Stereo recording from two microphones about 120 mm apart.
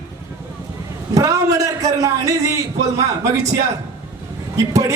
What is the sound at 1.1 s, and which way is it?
Speech, 30° right (ahead or behind).